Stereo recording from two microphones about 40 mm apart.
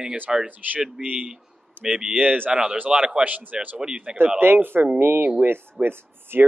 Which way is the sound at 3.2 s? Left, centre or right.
Right.